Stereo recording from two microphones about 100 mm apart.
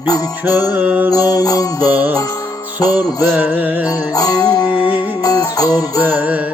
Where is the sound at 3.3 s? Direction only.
20° right (ahead or behind).